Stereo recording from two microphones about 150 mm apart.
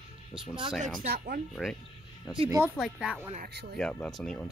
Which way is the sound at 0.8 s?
70° right (ahead or behind).